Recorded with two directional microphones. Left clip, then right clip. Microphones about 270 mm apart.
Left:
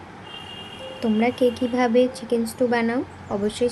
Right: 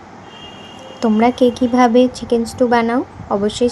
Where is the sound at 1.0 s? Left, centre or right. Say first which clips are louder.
Right 7 dB; centre.